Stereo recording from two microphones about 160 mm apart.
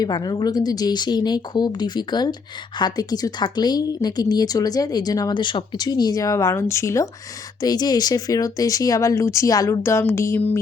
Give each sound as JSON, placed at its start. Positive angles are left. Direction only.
{"t": 0.0, "sound": "speech", "side_deg": 25}